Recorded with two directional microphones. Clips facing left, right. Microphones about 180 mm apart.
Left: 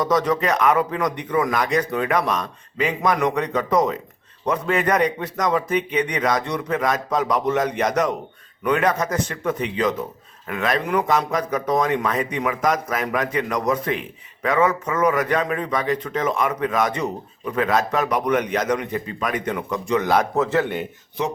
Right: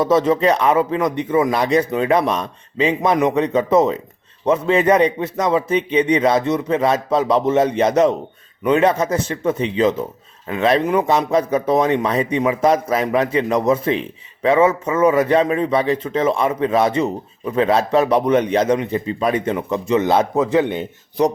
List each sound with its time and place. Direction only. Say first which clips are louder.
0.0 s a man's voice: right 5 dB; 25° right (ahead or behind)